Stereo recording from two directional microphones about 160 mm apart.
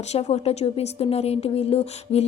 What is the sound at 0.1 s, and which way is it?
Speech, 40° left (ahead or behind).